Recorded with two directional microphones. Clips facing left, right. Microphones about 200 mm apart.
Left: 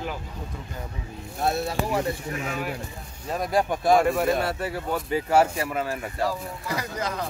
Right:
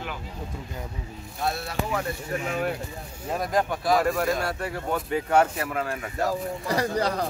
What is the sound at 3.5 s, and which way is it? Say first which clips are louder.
Speech: left 3 dB; 10° left (ahead or behind).